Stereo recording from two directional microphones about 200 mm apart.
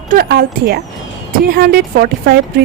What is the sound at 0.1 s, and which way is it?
Speech, 50° right (ahead or behind).